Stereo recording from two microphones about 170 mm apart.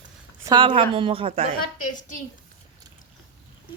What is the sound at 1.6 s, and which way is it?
Speech, 50° left (ahead or behind).